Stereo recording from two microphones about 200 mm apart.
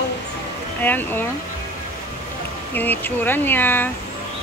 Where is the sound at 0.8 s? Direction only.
10° left (ahead or behind).